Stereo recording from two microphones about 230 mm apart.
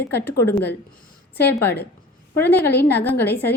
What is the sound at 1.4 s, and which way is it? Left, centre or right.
Speech, left.